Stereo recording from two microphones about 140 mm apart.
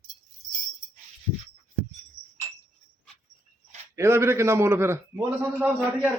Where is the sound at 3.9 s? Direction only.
20° right (ahead or behind).